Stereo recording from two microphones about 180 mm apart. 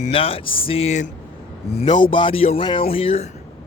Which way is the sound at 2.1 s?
30° left (ahead or behind).